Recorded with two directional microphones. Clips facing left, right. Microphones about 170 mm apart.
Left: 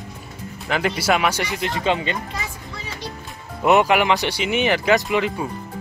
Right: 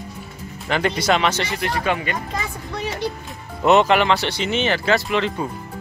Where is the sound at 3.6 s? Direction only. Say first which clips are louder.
Right 1 dB; 10° left (ahead or behind).